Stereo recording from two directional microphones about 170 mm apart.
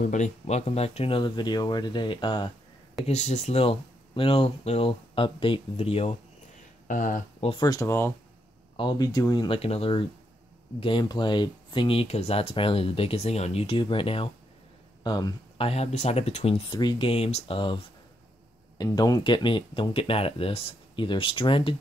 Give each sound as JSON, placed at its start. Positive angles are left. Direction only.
{"t": 0.0, "sound": "speech", "side_deg": 45}
{"t": 3.1, "sound": "speech", "side_deg": 40}
{"t": 6.9, "sound": "speech", "side_deg": 50}
{"t": 7.6, "sound": "speech", "side_deg": 20}
{"t": 18.8, "sound": "speech", "side_deg": 20}